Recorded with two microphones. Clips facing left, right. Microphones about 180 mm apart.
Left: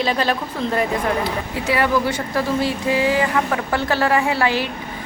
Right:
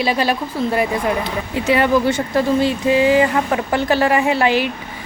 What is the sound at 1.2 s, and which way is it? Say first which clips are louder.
A woman's voice: right 1 dB; 20° right (ahead or behind).